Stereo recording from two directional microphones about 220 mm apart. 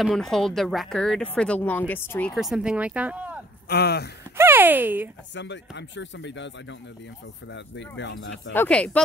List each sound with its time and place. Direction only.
0.0 s speech: centre (ahead or behind)
3.6 s speech: 45° left (ahead or behind)
4.4 s speech: 10° right (ahead or behind)
5.3 s speech: 55° left (ahead or behind)
8.5 s speech: 5° left (ahead or behind)